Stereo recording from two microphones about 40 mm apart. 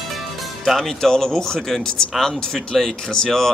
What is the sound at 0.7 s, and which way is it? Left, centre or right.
Speech, centre.